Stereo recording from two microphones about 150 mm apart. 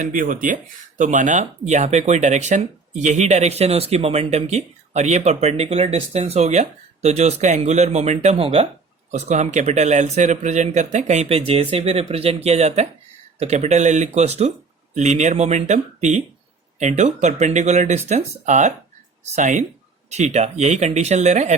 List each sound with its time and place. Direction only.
0.0 s speech: 65° right (ahead or behind)